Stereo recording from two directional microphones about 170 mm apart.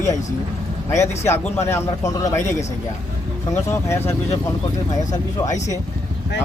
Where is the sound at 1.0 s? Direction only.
15° left (ahead or behind).